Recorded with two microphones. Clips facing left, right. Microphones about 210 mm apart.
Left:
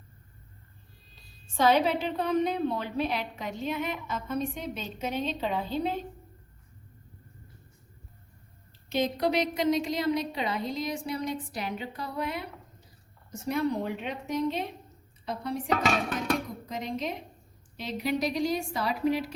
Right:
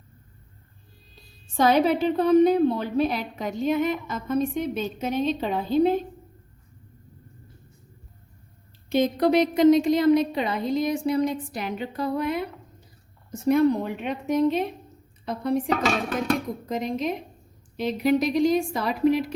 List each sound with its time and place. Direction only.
1.6 s a woman's voice: 45° right (ahead or behind)
8.9 s a woman's voice: 50° right (ahead or behind)
13.5 s a woman's voice: 50° right (ahead or behind)